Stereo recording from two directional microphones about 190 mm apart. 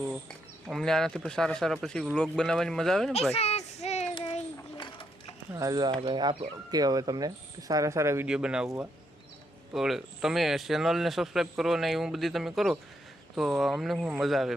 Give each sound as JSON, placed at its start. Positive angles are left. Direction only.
{"t": 0.7, "sound": "speech", "side_deg": 0}
{"t": 3.3, "sound": "speech", "side_deg": 35}
{"t": 3.8, "sound": "child singing", "side_deg": 35}
{"t": 5.5, "sound": "speech", "side_deg": -20}
{"t": 9.7, "sound": "speech", "side_deg": 0}